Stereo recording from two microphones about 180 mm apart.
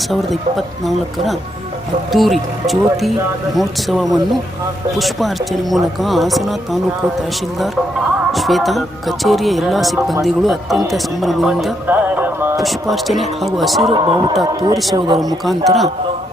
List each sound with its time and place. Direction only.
0.1 s speech: centre (ahead or behind)
8.3 s speech: centre (ahead or behind)
12.5 s speech: centre (ahead or behind)
13.8 s speech: 30° right (ahead or behind)
15.4 s speech: centre (ahead or behind)